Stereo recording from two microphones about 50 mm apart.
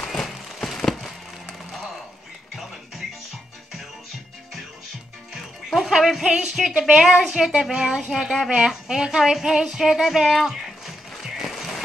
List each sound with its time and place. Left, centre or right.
0.1 s a sound: centre
5.3 s music: centre
6.2 s speech: centre
8.1 s speech: centre
8.5 s speech: centre
11.3 s music: centre